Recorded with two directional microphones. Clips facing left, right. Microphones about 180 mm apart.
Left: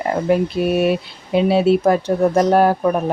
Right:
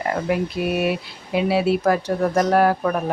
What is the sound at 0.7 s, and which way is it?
Speech, 25° left (ahead or behind).